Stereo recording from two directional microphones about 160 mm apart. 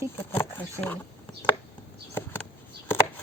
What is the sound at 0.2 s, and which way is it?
Speech, 15° left (ahead or behind).